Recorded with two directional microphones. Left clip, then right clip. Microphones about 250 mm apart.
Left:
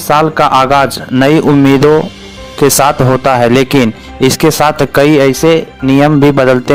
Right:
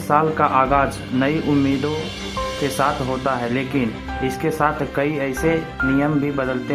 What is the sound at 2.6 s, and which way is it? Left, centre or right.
Speech, left.